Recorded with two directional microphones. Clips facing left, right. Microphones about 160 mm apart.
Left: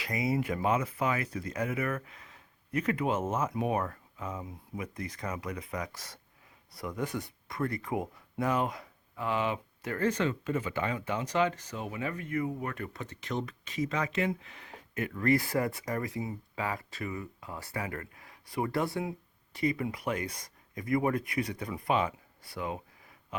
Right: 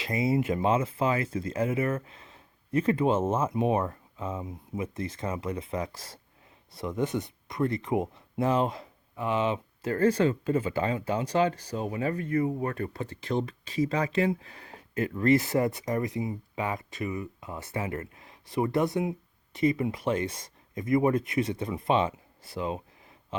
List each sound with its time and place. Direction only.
0.0 s speech: 25° right (ahead or behind)